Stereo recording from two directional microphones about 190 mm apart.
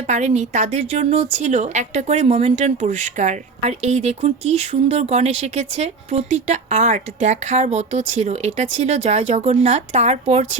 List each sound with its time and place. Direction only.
0.1 s a woman's voice: 35° right (ahead or behind)